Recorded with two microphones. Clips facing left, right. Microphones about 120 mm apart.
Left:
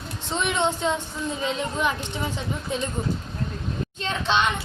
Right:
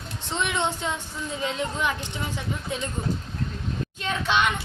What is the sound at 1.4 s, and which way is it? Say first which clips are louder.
Speech: left 1 dB; 20° left (ahead or behind).